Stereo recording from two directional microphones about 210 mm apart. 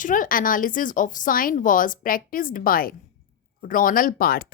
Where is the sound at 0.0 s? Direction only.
40° left (ahead or behind).